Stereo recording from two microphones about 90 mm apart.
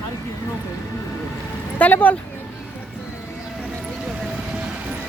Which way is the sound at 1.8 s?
20° left (ahead or behind).